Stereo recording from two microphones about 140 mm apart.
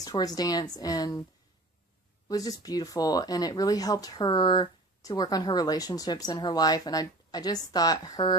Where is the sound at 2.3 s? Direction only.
25° left (ahead or behind).